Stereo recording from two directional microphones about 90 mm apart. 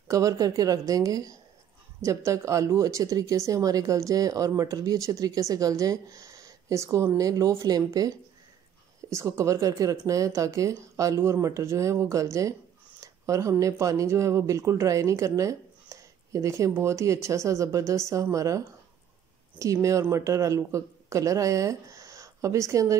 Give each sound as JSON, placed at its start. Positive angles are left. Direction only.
{"t": 0.1, "sound": "speech", "side_deg": -40}
{"t": 9.1, "sound": "speech", "side_deg": -35}
{"t": 19.6, "sound": "speech", "side_deg": -35}